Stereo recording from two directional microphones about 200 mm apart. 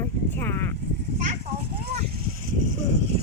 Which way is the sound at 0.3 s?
10° left (ahead or behind).